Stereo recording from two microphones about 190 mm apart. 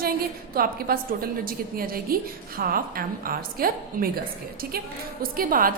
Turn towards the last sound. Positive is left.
turn(degrees=-50)  # may be behind; listen again after turning